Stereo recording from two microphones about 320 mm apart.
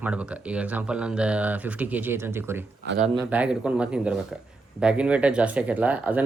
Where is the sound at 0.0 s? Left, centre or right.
Centre.